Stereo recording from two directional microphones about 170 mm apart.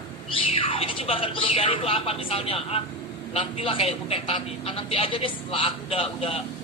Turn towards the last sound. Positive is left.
turn(degrees=35)  # may be behind; listen again after turning